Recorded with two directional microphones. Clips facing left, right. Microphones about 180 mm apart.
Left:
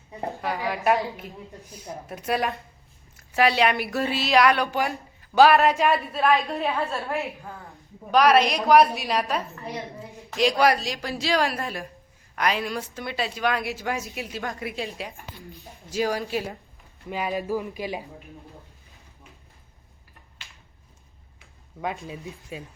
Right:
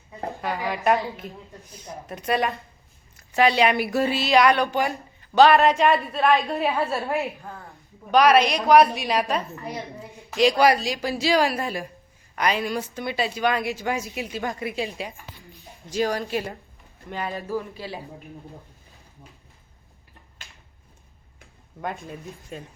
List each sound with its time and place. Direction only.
0.3 s a woman's voice: centre (ahead or behind)
21.8 s a woman's voice: centre (ahead or behind)